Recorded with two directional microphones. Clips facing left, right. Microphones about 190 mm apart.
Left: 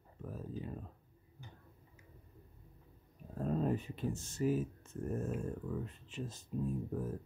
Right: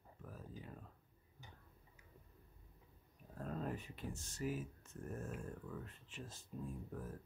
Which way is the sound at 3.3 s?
25° left (ahead or behind).